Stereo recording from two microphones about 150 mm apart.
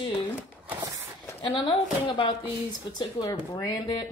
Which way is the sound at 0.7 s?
15° right (ahead or behind).